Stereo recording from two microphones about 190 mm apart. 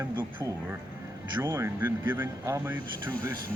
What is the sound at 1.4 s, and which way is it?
Speech, 15° right (ahead or behind).